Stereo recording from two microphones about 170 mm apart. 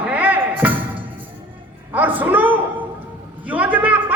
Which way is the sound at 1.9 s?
10° right (ahead or behind).